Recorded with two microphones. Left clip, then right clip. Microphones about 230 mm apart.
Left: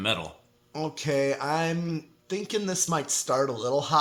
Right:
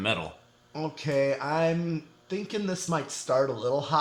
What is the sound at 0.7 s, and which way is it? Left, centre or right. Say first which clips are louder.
Speech: left 2 dB; left.